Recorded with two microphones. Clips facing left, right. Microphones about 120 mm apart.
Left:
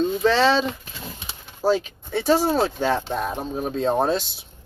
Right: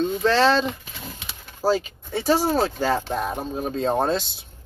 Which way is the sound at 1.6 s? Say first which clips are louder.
Left 1 dB; 5° right (ahead or behind).